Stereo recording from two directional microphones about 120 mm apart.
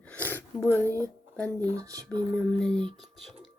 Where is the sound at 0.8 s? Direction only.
25° right (ahead or behind).